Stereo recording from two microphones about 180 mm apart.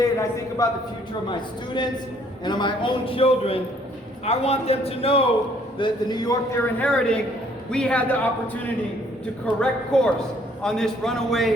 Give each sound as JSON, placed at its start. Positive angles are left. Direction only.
{"t": 0.0, "sound": "a man's voice", "side_deg": 20}
{"t": 5.8, "sound": "a man's voice", "side_deg": 25}
{"t": 6.7, "sound": "a man's voice", "side_deg": 5}